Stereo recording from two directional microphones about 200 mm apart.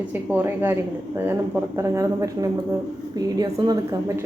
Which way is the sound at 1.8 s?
15° right (ahead or behind).